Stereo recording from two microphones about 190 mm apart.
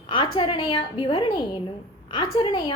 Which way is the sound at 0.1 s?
25° left (ahead or behind).